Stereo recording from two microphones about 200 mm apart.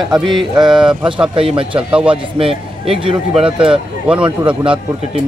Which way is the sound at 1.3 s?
25° right (ahead or behind).